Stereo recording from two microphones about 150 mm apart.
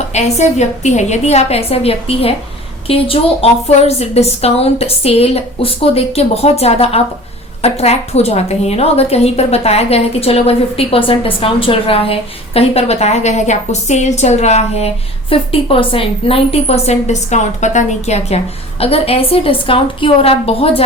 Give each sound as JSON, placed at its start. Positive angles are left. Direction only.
{"t": 0.1, "sound": "a woman's voice", "side_deg": 50}